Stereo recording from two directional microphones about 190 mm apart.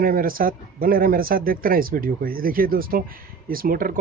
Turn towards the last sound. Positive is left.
turn(degrees=-45)  # may be behind; listen again after turning